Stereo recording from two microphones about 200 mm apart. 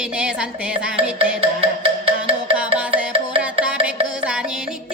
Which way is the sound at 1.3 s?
30° right (ahead or behind).